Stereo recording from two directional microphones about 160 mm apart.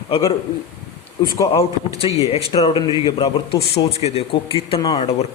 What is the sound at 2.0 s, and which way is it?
Speech, 30° left (ahead or behind).